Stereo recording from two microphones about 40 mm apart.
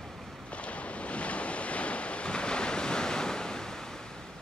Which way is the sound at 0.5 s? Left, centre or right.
Left.